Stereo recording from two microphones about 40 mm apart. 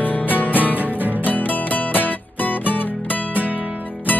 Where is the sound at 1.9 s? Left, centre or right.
Left.